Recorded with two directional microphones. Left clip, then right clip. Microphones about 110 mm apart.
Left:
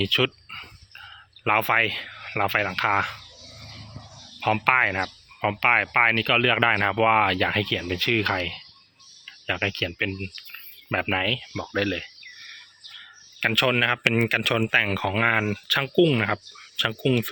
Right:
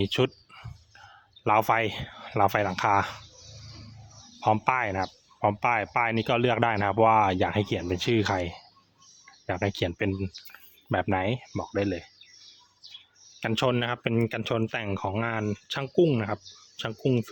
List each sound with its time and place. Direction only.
0.0 s speech: 30° right (ahead or behind)
4.4 s speech: 25° right (ahead or behind)
9.5 s speech: 25° right (ahead or behind)
9.7 s speech: 35° right (ahead or behind)
10.5 s speech: 20° right (ahead or behind)
13.4 s speech: 30° right (ahead or behind); by 17.2 s 10° right (ahead or behind)